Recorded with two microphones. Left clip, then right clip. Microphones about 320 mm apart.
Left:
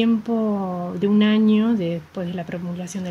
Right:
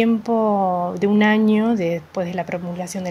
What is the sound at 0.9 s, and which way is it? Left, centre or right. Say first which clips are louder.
Speech: left 2 dB; centre.